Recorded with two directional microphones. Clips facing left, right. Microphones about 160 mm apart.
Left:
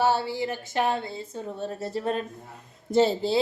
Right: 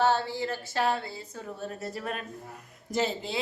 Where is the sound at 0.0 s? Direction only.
10° left (ahead or behind).